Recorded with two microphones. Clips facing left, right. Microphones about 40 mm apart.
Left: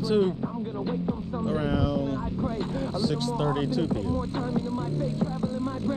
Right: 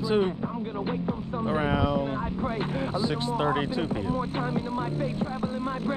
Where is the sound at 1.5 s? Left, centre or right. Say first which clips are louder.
Right 2 dB; right.